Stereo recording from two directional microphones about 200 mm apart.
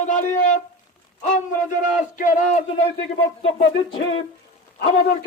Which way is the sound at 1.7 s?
40° left (ahead or behind).